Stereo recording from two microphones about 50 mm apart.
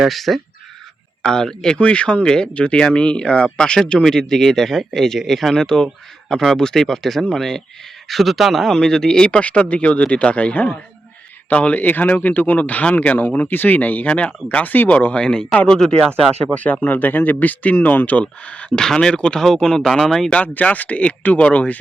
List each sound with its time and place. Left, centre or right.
0.0 s speech: centre
1.2 s speech: centre
8.0 s speech: centre
8.7 s speech: centre; by 15.0 s left
15.2 s speech: centre
16.4 s speech: left
18.8 s speech: centre
20.3 s speech: left